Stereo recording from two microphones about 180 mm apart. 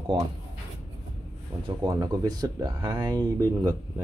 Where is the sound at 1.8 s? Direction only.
20° right (ahead or behind).